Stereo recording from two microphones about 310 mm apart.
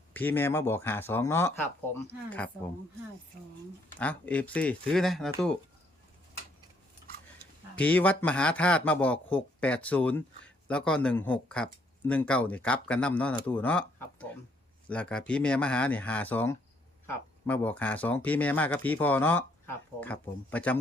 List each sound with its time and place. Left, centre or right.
0.1 s speech: centre
3.9 s speech: centre
7.8 s speech: centre